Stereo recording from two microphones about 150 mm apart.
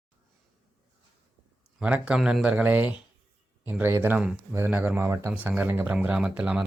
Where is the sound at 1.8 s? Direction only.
5° right (ahead or behind).